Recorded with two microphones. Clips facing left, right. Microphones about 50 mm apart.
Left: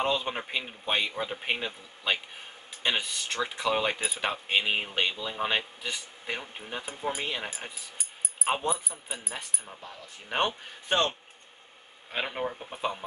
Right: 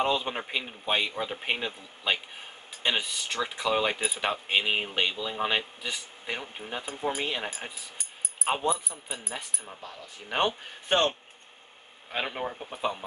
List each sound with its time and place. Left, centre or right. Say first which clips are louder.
0.0 s speech: right 1 dB; centre
8.6 s speech: right 2 dB; centre
8.9 s speech: right 1 dB; centre
10.9 s a man's voice: right 2 dB; right
12.1 s speech: even; centre